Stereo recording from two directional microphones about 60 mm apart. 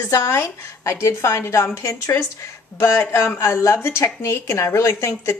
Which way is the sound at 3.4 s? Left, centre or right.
Left.